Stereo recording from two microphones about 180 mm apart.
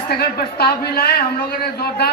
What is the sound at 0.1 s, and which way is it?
A man's voice, 60° left (ahead or behind).